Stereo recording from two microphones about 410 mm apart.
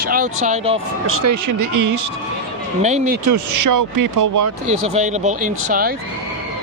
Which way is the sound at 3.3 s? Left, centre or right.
Right.